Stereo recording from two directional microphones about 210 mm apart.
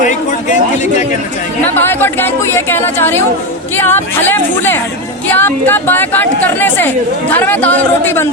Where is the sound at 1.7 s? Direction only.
10° left (ahead or behind).